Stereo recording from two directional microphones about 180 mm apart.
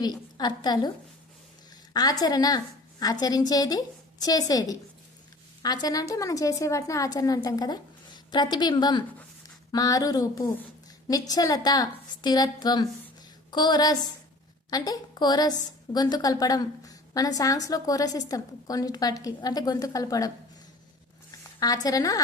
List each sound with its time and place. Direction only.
0.0 s a woman's voice: 20° left (ahead or behind)
1.9 s a woman's voice: 20° left (ahead or behind)
21.6 s a woman's voice: 20° left (ahead or behind)